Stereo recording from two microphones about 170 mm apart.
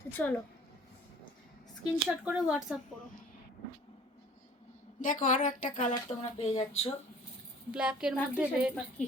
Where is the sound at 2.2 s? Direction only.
5° right (ahead or behind).